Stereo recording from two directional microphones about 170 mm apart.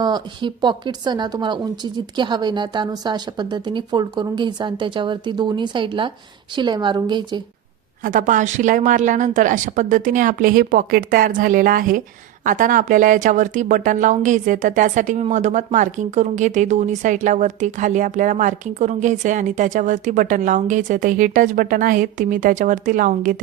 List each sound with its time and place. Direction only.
0.0 s speech: 25° right (ahead or behind)
8.0 s speech: 50° right (ahead or behind)